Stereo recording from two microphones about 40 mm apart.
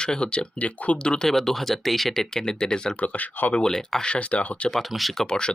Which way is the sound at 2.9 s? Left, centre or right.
Left.